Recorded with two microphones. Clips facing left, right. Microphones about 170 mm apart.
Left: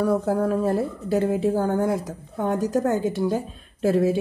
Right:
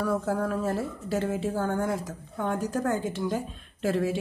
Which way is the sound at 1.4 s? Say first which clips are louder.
Left 7 dB; 45° left (ahead or behind).